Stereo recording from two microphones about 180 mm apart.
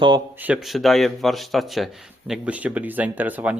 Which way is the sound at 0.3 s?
10° right (ahead or behind).